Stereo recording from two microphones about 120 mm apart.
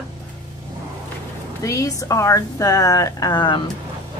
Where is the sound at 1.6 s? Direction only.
25° left (ahead or behind).